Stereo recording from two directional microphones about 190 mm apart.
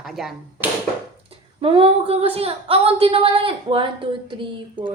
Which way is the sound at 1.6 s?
30° right (ahead or behind).